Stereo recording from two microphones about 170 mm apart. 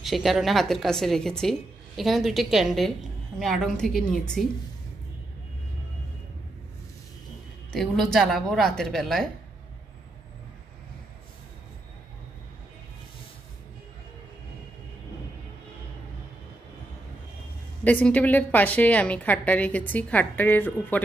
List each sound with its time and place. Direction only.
0.0 s speech: centre (ahead or behind)
7.7 s speech: 5° left (ahead or behind)
17.8 s a woman's voice: 10° left (ahead or behind)